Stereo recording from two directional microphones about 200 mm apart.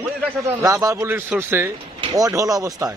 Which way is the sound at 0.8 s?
15° right (ahead or behind).